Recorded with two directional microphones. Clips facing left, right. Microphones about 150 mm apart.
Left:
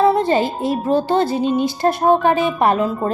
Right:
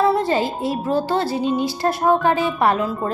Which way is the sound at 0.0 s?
20° left (ahead or behind).